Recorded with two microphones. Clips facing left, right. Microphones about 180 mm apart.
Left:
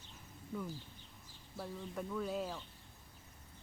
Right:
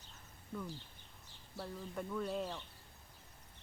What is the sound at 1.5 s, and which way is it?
Speech, centre (ahead or behind).